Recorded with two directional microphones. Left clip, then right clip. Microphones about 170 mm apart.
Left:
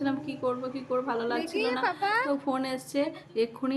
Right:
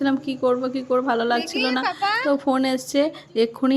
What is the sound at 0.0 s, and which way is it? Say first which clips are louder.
Speech: right 8 dB; 45° right (ahead or behind).